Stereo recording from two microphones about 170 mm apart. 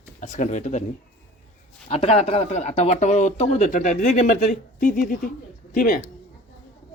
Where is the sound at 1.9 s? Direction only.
35° left (ahead or behind); by 6.0 s 50° left (ahead or behind).